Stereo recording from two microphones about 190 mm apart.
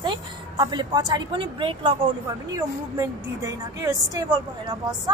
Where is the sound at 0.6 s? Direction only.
20° right (ahead or behind).